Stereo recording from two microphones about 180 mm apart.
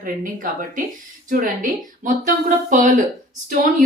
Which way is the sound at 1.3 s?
45° right (ahead or behind).